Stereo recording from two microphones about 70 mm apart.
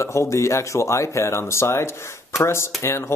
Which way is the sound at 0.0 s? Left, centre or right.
Left.